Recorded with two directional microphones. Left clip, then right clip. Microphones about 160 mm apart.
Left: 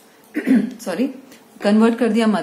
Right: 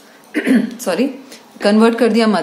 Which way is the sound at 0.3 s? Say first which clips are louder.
Right 3 dB; 15° right (ahead or behind).